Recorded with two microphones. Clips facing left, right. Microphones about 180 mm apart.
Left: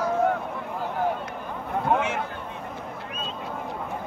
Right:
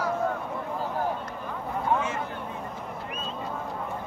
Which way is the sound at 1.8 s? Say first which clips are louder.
Left 3 dB; 70° left (ahead or behind).